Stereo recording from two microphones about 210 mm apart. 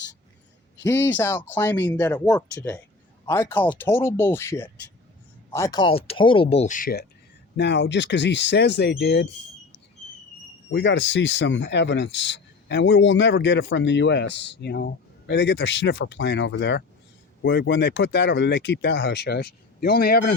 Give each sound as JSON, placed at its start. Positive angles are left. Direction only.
{"t": 0.8, "sound": "speech", "side_deg": 15}
{"t": 7.5, "sound": "speech", "side_deg": 55}
{"t": 10.7, "sound": "speech", "side_deg": 55}